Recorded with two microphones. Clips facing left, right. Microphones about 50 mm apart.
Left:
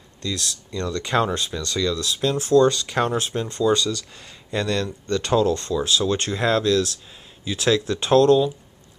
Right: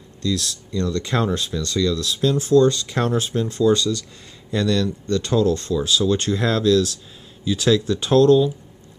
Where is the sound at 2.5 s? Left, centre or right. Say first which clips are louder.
Even; left.